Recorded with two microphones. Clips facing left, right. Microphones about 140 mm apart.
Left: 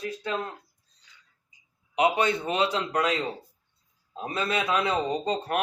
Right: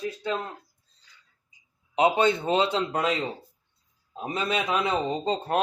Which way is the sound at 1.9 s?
30° right (ahead or behind).